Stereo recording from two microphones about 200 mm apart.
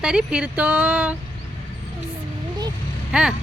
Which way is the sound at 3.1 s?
5° right (ahead or behind).